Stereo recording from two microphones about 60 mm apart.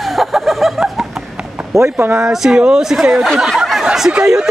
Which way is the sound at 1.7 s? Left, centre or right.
Right.